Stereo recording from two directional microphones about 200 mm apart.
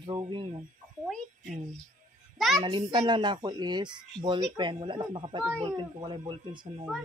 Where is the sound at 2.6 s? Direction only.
25° right (ahead or behind).